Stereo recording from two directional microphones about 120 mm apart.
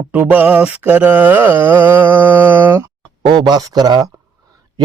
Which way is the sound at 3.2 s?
40° right (ahead or behind).